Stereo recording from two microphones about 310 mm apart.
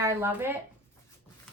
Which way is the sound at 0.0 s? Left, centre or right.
Centre.